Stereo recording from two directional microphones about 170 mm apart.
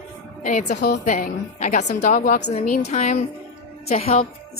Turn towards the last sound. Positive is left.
turn(degrees=35)  # may be behind; listen again after turning